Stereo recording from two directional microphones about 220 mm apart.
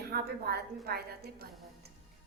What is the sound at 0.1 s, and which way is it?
A woman's voice, 45° right (ahead or behind).